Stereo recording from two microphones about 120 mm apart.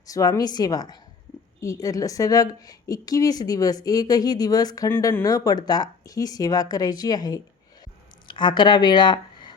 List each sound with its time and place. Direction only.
0.1 s a woman's voice: 30° left (ahead or behind)
4.9 s a woman's voice: 20° left (ahead or behind); by 9.6 s 40° left (ahead or behind)